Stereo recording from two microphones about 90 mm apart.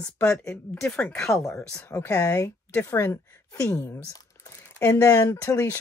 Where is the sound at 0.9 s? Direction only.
20° left (ahead or behind).